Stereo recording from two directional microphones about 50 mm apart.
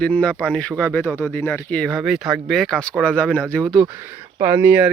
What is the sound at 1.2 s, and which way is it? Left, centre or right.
Speech, left.